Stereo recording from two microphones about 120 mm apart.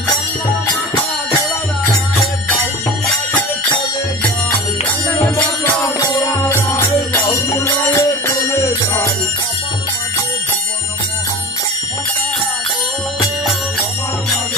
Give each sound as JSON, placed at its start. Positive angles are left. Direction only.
{"t": 5.1, "sound": "music", "side_deg": 25}
{"t": 6.8, "sound": "music", "side_deg": 15}